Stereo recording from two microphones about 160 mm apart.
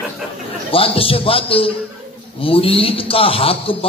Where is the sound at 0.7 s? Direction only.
35° left (ahead or behind).